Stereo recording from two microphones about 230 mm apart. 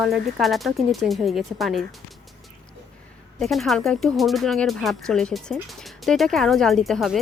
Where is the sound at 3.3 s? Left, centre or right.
Centre.